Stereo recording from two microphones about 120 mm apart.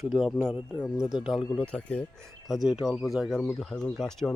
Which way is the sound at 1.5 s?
10° left (ahead or behind).